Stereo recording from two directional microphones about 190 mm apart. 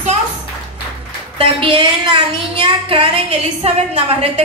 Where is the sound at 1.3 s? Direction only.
30° right (ahead or behind).